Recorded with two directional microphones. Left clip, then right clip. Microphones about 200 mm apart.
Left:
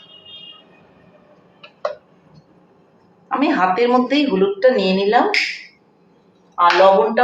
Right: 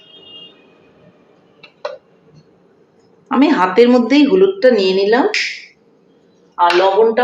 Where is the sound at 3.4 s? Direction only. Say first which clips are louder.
Right 5 dB; 50° right (ahead or behind).